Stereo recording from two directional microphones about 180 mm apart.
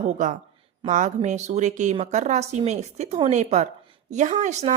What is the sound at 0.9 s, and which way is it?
A woman's voice, 45° right (ahead or behind).